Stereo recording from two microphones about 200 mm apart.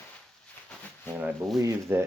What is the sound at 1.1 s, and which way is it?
Speech, 5° right (ahead or behind).